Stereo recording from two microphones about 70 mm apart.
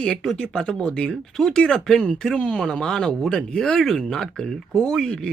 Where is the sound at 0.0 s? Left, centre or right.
Centre.